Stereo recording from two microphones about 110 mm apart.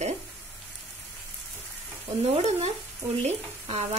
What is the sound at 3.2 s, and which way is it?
Speech, 90° right.